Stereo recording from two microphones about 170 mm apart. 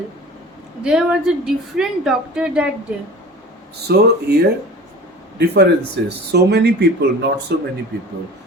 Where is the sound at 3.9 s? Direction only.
70° right (ahead or behind).